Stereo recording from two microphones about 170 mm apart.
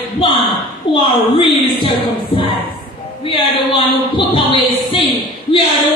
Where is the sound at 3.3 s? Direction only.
30° left (ahead or behind).